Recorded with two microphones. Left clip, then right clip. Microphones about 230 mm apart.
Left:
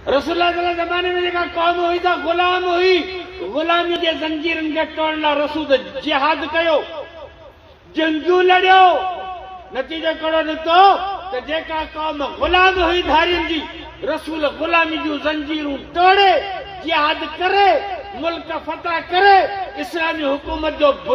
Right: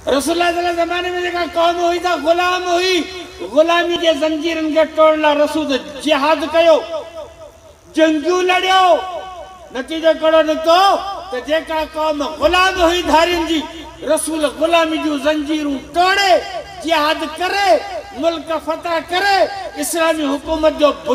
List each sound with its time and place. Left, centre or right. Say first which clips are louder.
0.0 s a man's voice: right 1 dB; right
7.9 s a man's voice: right 3 dB; right